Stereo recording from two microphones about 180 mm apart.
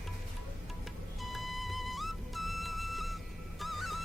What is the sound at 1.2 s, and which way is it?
Music, centre (ahead or behind).